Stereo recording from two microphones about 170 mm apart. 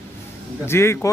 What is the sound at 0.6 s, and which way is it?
Speech, 15° left (ahead or behind).